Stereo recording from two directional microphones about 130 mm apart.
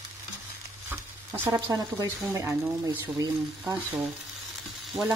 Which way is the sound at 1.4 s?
20° right (ahead or behind).